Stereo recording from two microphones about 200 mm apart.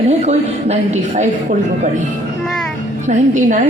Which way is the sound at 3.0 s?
40° right (ahead or behind).